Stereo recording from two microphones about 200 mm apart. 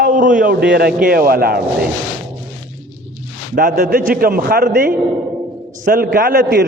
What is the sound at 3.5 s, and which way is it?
A man's voice, 45° right (ahead or behind).